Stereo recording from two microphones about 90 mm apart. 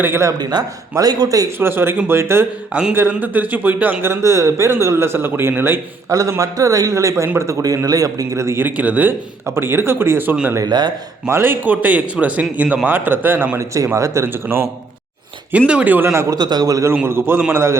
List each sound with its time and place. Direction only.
0.0 s speech: 30° right (ahead or behind)
0.3 s a man's voice: 45° right (ahead or behind)
1.5 s speech: 25° right (ahead or behind)
6.1 s a man's voice: 35° right (ahead or behind)
8.6 s speech: 15° right (ahead or behind)
10.7 s a man's voice: 55° right (ahead or behind)
11.3 s speech: 25° right (ahead or behind)
13.7 s a man's voice: 35° right (ahead or behind)
15.5 s speech: 15° right (ahead or behind)
16.3 s a man's voice: 50° right (ahead or behind)
17.1 s a man's voice: 25° right (ahead or behind)